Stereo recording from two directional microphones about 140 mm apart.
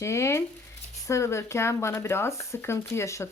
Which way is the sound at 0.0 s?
20° left (ahead or behind).